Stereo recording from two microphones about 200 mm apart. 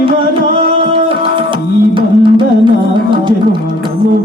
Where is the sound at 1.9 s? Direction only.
25° right (ahead or behind).